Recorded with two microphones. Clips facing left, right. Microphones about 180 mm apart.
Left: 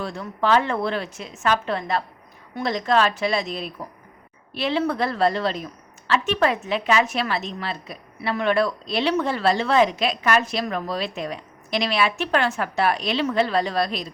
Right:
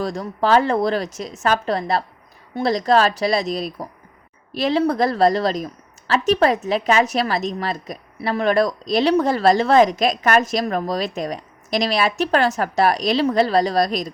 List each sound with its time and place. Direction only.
0.0 s a woman's voice: 40° right (ahead or behind)